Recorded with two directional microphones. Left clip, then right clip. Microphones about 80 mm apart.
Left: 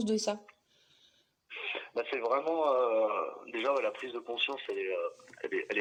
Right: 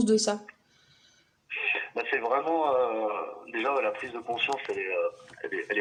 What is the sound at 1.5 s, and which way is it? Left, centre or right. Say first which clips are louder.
Speech: right 6 dB; left.